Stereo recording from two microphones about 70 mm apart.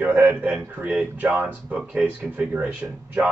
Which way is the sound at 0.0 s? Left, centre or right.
Centre.